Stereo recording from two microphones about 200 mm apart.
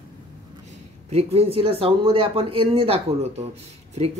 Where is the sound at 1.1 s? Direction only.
30° right (ahead or behind).